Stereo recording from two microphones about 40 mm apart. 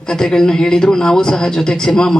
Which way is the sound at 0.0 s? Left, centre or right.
Centre.